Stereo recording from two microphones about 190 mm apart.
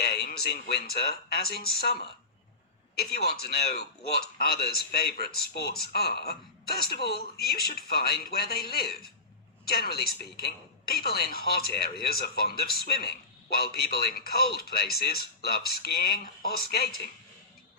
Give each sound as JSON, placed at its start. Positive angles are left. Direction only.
{"t": 0.0, "sound": "speech", "side_deg": 55}